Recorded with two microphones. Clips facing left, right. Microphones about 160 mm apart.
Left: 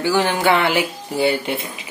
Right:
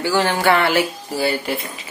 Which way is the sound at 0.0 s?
15° left (ahead or behind).